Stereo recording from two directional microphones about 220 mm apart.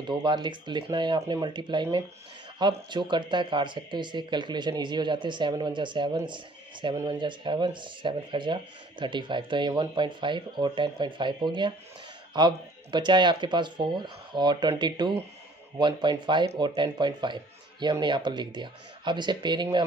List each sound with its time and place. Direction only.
0.1 s speech: 20° right (ahead or behind)